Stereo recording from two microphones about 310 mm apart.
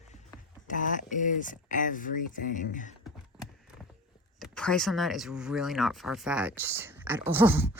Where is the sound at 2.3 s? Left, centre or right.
Left.